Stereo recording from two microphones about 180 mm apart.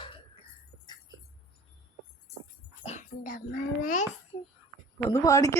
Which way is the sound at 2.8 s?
40° left (ahead or behind).